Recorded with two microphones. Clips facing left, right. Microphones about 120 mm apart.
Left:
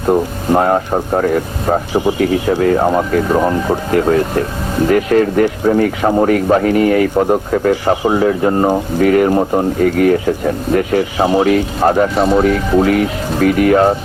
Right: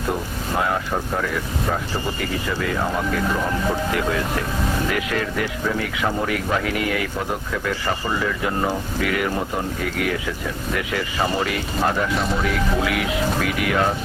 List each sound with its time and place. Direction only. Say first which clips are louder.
0.1 s speech: left 13 dB; 45° left (ahead or behind)
1.9 s speech: left 11 dB; 15° left (ahead or behind)
2.3 s speech: left 10 dB; 50° left (ahead or behind)